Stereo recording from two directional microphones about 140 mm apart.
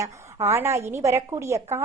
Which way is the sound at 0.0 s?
20° right (ahead or behind).